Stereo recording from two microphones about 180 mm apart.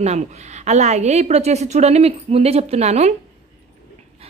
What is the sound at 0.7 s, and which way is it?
A woman's voice, 40° right (ahead or behind).